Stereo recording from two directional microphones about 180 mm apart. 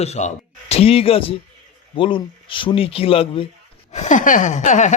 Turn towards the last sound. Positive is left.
turn(degrees=45)  # may be behind; listen again after turning